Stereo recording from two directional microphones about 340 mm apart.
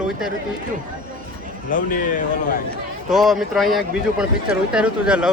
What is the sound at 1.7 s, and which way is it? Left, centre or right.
Speech, left.